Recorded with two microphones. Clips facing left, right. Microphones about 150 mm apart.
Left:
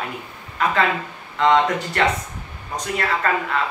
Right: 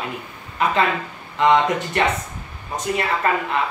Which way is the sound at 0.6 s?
20° right (ahead or behind).